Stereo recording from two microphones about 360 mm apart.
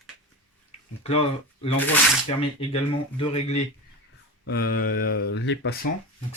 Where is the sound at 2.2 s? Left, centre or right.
Centre.